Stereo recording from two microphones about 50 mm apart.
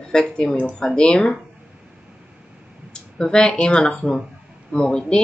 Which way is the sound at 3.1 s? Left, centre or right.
Centre.